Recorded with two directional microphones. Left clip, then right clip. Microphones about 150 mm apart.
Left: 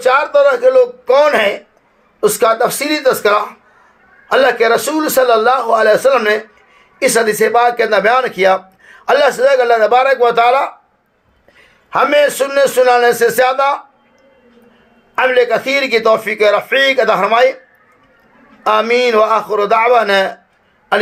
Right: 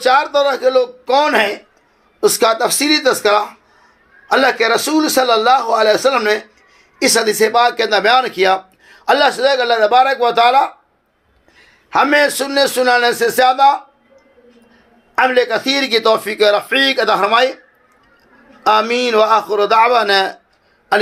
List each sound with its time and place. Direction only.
0.0 s a man's voice: 40° right (ahead or behind)
11.9 s a man's voice: 35° right (ahead or behind)
15.1 s a man's voice: 40° right (ahead or behind)
18.6 s a man's voice: 35° right (ahead or behind)